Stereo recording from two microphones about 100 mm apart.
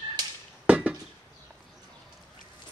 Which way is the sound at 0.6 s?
15° right (ahead or behind).